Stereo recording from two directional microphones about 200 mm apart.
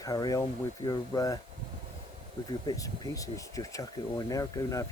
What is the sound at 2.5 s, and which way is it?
Speech, 20° left (ahead or behind).